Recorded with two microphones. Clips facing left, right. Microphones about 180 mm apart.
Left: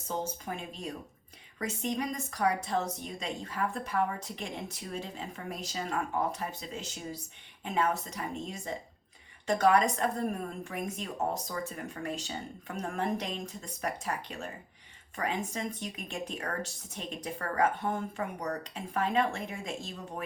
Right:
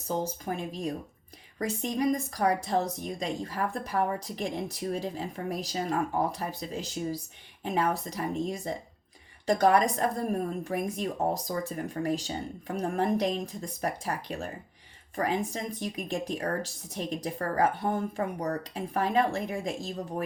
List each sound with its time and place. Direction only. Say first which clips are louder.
0.1 s a woman's voice: right 4 dB; 35° right (ahead or behind)